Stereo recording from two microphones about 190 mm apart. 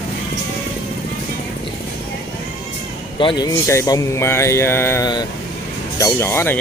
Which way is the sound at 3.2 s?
25° left (ahead or behind).